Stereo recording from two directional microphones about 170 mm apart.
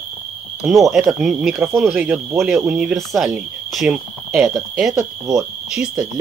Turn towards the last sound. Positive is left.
turn(degrees=-5)  # may be behind; listen again after turning